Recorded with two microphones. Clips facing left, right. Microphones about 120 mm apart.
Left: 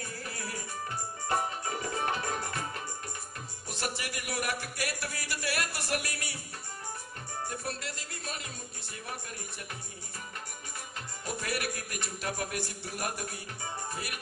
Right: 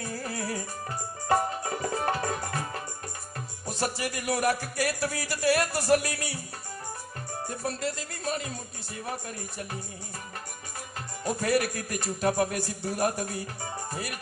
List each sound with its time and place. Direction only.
0.1 s music: 40° right (ahead or behind)
7.4 s music: 35° right (ahead or behind)
11.2 s a man's voice: 35° right (ahead or behind)
13.8 s music: 40° right (ahead or behind)